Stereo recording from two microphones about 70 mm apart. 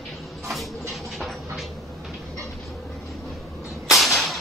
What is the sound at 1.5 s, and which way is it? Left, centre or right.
Vehicle, centre.